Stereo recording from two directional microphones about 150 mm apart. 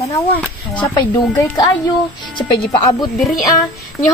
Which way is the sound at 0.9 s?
25° left (ahead or behind).